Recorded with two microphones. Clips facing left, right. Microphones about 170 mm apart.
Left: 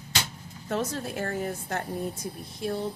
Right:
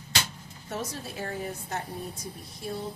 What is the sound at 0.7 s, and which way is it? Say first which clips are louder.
A woman's voice: left 6 dB; 60° left (ahead or behind).